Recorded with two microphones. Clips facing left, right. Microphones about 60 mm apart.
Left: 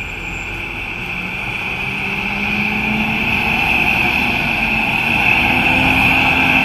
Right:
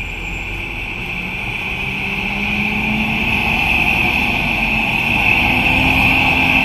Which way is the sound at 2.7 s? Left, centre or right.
Centre.